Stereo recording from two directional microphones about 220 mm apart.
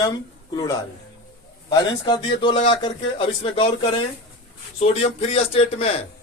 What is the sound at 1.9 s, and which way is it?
Speech, 20° left (ahead or behind).